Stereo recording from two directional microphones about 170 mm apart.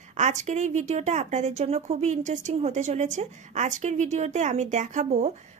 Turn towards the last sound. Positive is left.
turn(degrees=-40)  # may be behind; listen again after turning